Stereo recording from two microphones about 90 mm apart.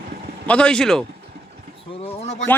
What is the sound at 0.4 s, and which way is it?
Speech, 10° left (ahead or behind).